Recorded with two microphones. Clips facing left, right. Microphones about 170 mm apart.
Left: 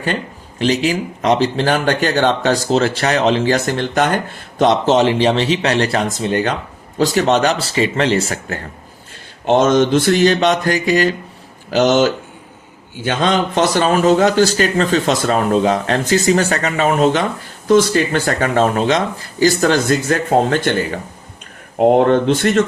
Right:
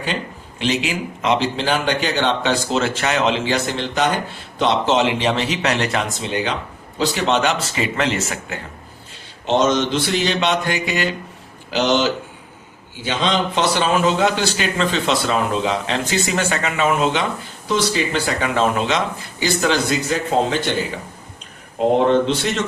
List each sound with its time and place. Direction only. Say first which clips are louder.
0.6 s speech: left 5 dB; 40° left (ahead or behind)
9.5 s speech: left 5 dB; 50° left (ahead or behind)